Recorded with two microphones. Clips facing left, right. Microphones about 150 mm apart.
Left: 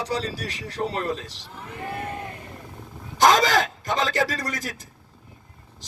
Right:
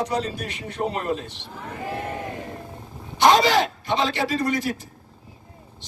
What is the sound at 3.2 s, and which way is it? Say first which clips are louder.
Speech: right 2 dB; 45° left (ahead or behind).